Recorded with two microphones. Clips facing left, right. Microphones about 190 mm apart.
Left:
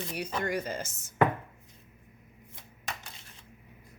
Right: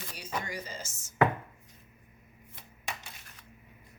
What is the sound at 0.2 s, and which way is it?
Speech, 60° left (ahead or behind).